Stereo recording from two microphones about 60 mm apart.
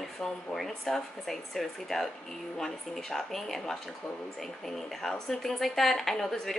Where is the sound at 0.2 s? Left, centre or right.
Centre.